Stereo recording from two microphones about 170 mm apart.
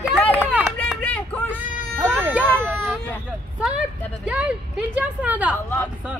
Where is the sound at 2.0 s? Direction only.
10° right (ahead or behind).